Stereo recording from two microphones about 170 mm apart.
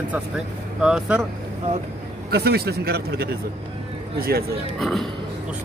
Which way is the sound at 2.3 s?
70° right (ahead or behind).